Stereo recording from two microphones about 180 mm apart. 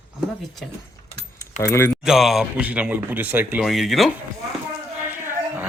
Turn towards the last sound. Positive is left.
turn(degrees=-10)  # may be behind; listen again after turning